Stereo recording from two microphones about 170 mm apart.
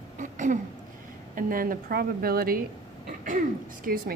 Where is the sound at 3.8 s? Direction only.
60° right (ahead or behind).